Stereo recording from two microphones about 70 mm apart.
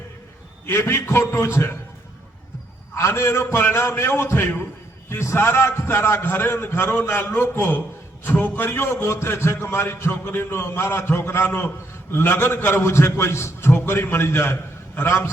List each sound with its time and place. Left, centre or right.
0.7 s a man's voice: left
2.9 s a man's voice: left